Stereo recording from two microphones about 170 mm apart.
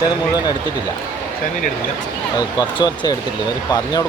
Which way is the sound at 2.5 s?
25° left (ahead or behind).